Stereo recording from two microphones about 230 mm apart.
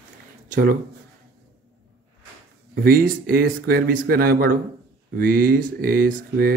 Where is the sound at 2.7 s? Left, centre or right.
Right.